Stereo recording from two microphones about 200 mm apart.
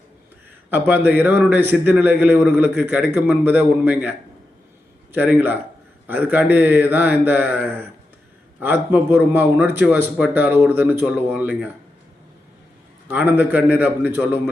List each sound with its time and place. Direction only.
0.7 s a man's voice: 10° right (ahead or behind)
5.1 s a man's voice: 10° right (ahead or behind)
13.1 s a man's voice: 10° right (ahead or behind)